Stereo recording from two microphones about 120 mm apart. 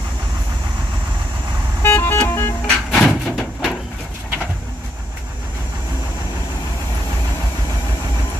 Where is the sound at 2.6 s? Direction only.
5° left (ahead or behind).